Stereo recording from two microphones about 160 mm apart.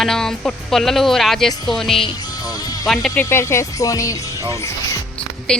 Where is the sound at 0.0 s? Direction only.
5° left (ahead or behind).